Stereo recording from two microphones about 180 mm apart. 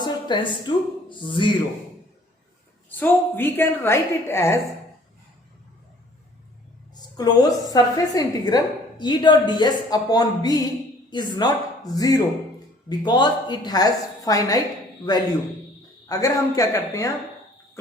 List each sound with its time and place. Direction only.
0.0 s a sound: 25° left (ahead or behind)
1.3 s a woman's voice: 25° left (ahead or behind)
2.9 s a woman's voice: 10° left (ahead or behind)
7.2 s a woman's voice: 20° left (ahead or behind)
16.0 s a woman's voice: 20° left (ahead or behind)